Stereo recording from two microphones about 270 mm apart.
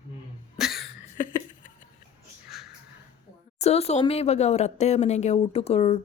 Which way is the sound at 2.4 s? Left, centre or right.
Centre.